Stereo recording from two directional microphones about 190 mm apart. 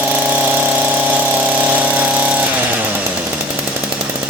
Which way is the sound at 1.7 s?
10° right (ahead or behind).